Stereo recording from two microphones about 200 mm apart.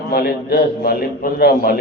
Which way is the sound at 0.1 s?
45° left (ahead or behind).